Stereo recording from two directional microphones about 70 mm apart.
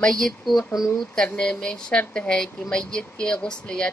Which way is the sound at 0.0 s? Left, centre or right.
Centre.